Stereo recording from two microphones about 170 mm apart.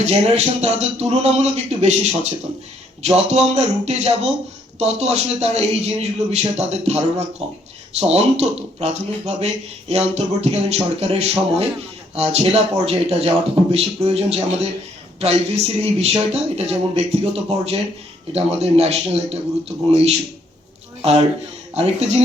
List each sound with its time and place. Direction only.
0.0 s a man's voice: 40° right (ahead or behind)
21.8 s a man's voice: 40° right (ahead or behind)